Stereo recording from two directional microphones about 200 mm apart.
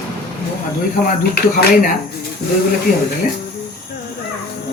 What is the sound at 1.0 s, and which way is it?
Speech, 45° left (ahead or behind).